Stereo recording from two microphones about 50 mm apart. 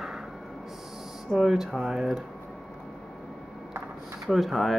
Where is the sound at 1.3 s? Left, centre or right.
Centre.